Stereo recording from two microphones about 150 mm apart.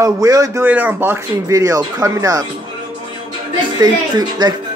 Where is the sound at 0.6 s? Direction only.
10° right (ahead or behind).